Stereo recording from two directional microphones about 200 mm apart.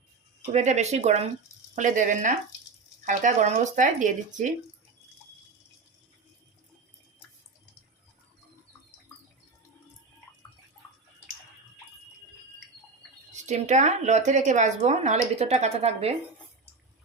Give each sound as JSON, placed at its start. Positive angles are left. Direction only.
{"t": 0.5, "sound": "speech", "side_deg": -35}
{"t": 13.3, "sound": "speech", "side_deg": -35}